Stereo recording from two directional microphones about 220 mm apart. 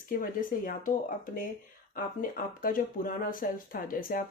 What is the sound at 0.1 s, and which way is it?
Speech, 40° left (ahead or behind).